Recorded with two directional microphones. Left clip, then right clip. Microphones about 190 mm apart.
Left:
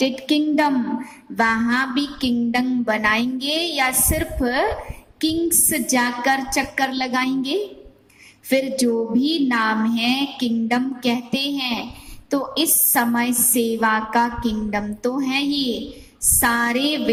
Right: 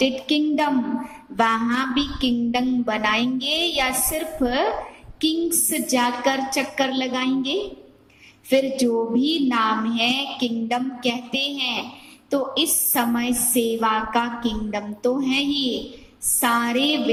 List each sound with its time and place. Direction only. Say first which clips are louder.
0.0 s a woman's voice: left 1 dB; 45° left (ahead or behind)